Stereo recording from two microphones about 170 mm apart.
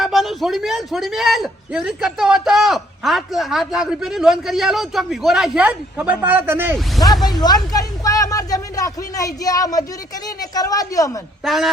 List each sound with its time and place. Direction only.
0.0 s a man's voice: centre (ahead or behind)
7.3 s a woman's voice: 25° left (ahead or behind)
11.4 s a man's voice: centre (ahead or behind)